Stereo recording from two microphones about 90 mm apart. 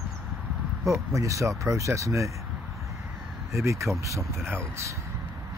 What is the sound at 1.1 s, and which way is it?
Speech, 35° right (ahead or behind).